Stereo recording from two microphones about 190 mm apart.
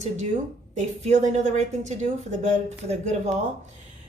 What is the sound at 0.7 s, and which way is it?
A woman's voice, 35° right (ahead or behind).